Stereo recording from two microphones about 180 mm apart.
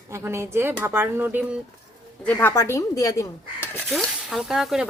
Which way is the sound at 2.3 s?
10° left (ahead or behind).